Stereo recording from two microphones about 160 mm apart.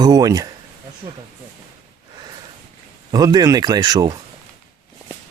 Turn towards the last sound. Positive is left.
turn(degrees=-25)  # may be behind; listen again after turning